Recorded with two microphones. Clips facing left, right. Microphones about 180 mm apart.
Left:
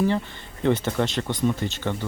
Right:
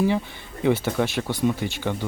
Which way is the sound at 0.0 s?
10° right (ahead or behind).